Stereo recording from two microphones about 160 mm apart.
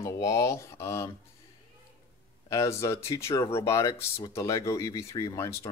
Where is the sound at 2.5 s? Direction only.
20° left (ahead or behind).